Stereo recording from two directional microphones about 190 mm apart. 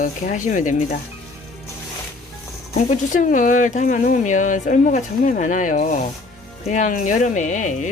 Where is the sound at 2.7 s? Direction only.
40° left (ahead or behind).